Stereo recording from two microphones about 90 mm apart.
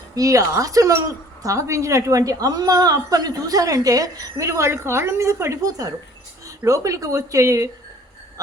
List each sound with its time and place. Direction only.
0.2 s a woman's voice: 40° right (ahead or behind)